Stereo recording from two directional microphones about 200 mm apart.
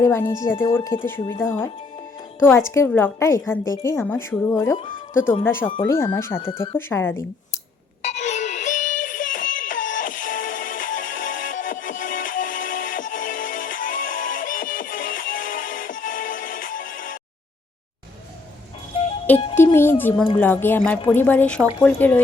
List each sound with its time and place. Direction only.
0.0 s speech: 15° left (ahead or behind)
8.1 s synthetic singing: 35° left (ahead or behind)
19.5 s music: 10° left (ahead or behind)
20.4 s speech: 10° left (ahead or behind)